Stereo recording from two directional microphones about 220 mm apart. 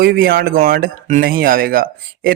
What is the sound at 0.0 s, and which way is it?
Speech, 45° right (ahead or behind).